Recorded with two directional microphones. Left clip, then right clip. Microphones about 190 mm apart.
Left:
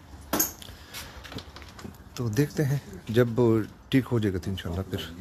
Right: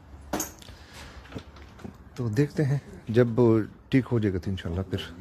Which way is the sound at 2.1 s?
20° right (ahead or behind).